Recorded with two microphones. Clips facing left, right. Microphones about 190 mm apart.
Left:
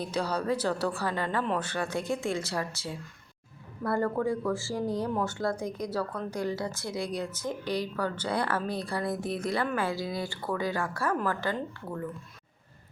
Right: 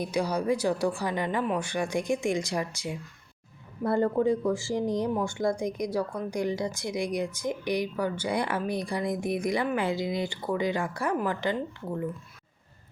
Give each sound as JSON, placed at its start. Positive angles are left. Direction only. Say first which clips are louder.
{"t": 0.0, "sound": "speech", "louder": "right 3 dB", "side_deg": -10}